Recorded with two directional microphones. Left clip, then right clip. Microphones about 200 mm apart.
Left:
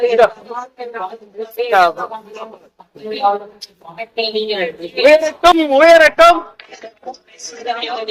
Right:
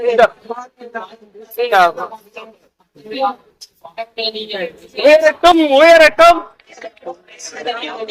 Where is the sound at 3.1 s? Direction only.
50° left (ahead or behind).